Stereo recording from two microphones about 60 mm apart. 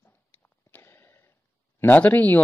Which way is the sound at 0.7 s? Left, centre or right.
Left.